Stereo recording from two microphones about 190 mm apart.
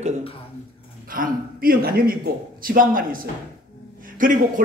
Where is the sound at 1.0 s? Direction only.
45° right (ahead or behind).